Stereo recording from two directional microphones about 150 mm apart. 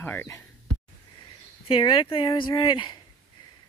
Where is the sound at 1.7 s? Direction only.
35° left (ahead or behind).